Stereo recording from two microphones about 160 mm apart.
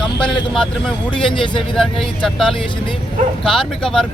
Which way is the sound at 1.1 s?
30° left (ahead or behind).